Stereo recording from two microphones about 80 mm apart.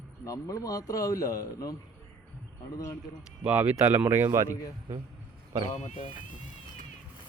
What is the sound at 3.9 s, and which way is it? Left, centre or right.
Speech, right.